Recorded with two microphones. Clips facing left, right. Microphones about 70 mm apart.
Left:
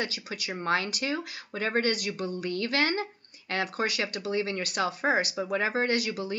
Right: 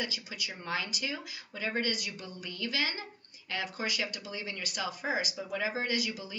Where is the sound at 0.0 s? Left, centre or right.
Left.